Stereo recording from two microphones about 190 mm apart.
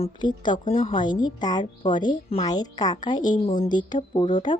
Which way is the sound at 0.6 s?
40° left (ahead or behind).